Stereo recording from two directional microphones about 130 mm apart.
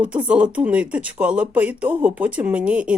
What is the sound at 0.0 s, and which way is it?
Speech, 10° right (ahead or behind).